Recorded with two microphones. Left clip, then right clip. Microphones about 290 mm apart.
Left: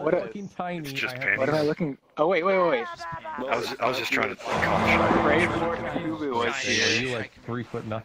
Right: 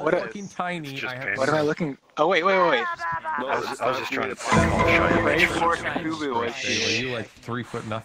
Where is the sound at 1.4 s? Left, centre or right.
Right.